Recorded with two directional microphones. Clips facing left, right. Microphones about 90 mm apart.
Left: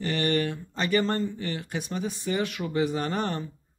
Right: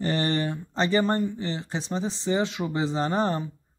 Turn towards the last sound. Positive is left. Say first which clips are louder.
# right 4 dB
turn(degrees=-25)  # may be behind; listen again after turning